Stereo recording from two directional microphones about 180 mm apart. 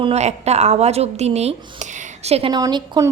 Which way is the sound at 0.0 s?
35° right (ahead or behind).